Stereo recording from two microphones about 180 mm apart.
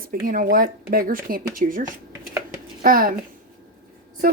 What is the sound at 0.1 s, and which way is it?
Speech, 55° right (ahead or behind).